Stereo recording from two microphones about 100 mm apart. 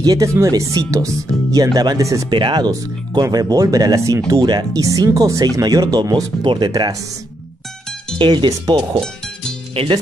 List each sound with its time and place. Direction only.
0.0 s speech: 40° right (ahead or behind)
2.2 s speech: 50° right (ahead or behind)
6.4 s speech: 55° right (ahead or behind)
6.7 s speech: 40° right (ahead or behind)
8.2 s speech: 55° right (ahead or behind)